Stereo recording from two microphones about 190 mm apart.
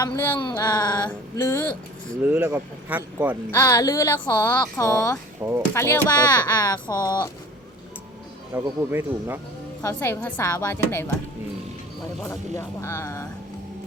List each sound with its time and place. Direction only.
0.0 s speech: 10° left (ahead or behind)
0.3 s a sound: 20° left (ahead or behind)
2.2 s speech: 10° right (ahead or behind)
3.5 s speech: 15° left (ahead or behind)
5.4 s speech: 15° right (ahead or behind)
5.7 s a sound: 10° left (ahead or behind)
8.6 s speech: 15° right (ahead or behind)
9.8 s speech: 15° left (ahead or behind)
12.2 s speech: 15° left (ahead or behind)